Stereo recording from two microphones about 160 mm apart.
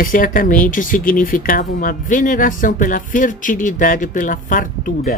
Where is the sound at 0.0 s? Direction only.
60° left (ahead or behind).